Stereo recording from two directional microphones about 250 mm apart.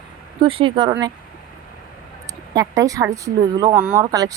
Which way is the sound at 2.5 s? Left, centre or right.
Centre.